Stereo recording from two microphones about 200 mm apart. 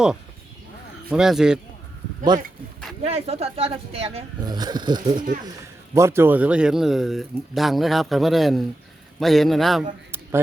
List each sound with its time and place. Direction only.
1.1 s speech: 5° right (ahead or behind)
3.0 s speech: 30° right (ahead or behind); by 9.8 s centre (ahead or behind)